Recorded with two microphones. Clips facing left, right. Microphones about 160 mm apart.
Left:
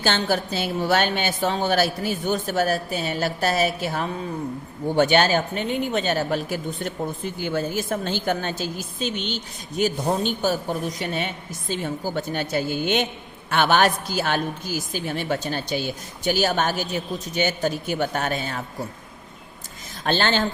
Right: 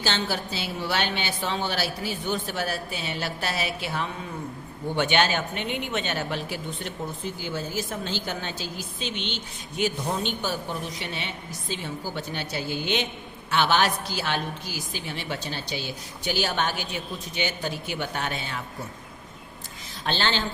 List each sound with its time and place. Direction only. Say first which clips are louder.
0.0 s a woman's voice: left 5 dB; 50° left (ahead or behind)
7.4 s a woman's voice: left 7 dB; 55° left (ahead or behind)
20.1 s a woman's voice: left 5 dB; 50° left (ahead or behind)